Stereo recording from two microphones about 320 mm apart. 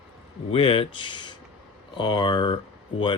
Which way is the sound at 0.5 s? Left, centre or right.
Centre.